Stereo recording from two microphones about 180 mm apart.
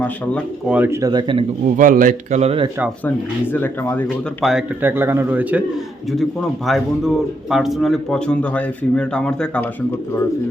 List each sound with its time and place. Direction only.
0.7 s speech: 10° right (ahead or behind)
1.6 s a man's voice: 45° right (ahead or behind)
3.0 s speech: 10° left (ahead or behind)
4.4 s a man's voice: 5° right (ahead or behind)